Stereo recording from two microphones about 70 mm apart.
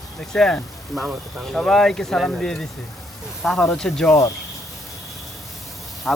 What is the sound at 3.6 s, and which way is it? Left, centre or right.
Speech, centre.